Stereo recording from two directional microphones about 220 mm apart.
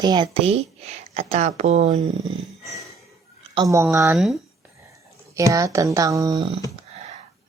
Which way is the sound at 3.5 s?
15° right (ahead or behind).